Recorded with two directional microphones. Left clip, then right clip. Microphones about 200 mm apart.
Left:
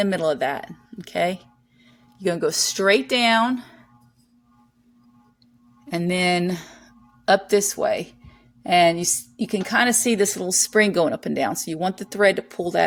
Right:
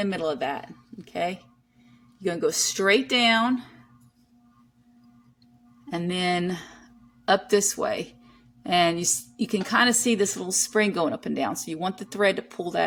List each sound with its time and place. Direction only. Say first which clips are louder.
0.0 s a woman's voice: left 6 dB; 30° left (ahead or behind)
5.9 s a woman's voice: left 5 dB; 25° left (ahead or behind)